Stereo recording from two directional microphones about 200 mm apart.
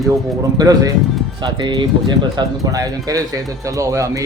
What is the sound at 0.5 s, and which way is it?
Speech, 20° right (ahead or behind).